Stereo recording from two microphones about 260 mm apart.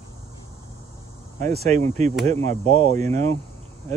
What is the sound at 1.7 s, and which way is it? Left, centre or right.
Speech, right.